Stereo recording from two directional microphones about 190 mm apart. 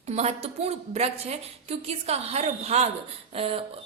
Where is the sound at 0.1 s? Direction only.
35° right (ahead or behind).